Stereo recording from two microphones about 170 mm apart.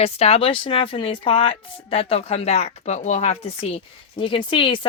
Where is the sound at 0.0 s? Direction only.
35° left (ahead or behind).